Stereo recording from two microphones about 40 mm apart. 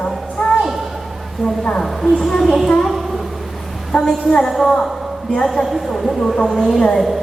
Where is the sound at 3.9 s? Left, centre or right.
Left.